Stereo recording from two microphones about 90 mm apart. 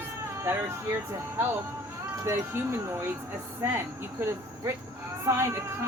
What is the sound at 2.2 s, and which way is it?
Speech, 30° right (ahead or behind).